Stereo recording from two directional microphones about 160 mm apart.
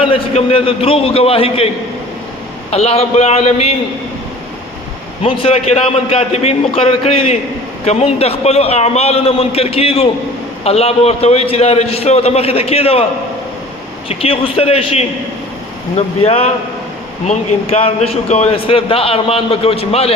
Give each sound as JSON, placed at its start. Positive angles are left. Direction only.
{"t": 0.0, "sound": "a man's voice", "side_deg": 35}
{"t": 5.2, "sound": "a man's voice", "side_deg": 35}
{"t": 14.1, "sound": "a man's voice", "side_deg": 35}